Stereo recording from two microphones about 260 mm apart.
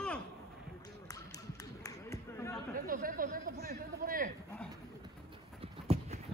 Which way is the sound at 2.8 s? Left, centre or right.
Right.